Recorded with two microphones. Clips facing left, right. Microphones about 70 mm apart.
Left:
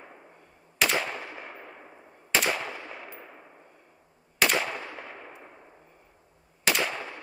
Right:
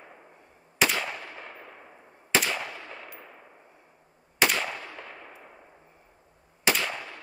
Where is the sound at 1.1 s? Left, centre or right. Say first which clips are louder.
Left 2 dB; left.